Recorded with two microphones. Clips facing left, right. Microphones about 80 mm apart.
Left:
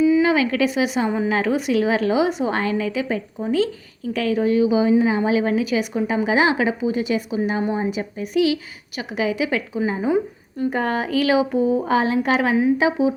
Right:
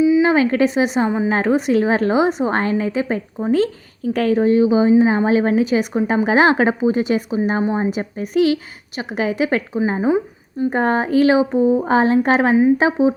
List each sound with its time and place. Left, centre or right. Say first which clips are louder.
0.2 s a woman's voice: right 3 dB; right
6.2 s a woman's voice: right 4 dB; right